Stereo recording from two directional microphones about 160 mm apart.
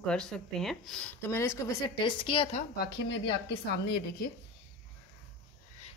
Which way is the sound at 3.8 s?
80° left.